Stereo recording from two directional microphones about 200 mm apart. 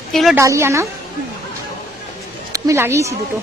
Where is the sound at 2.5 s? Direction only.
15° right (ahead or behind).